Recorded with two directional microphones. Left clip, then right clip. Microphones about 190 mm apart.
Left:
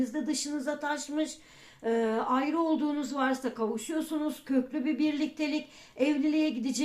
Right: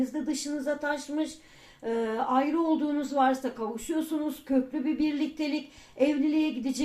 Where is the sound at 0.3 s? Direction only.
30° left (ahead or behind).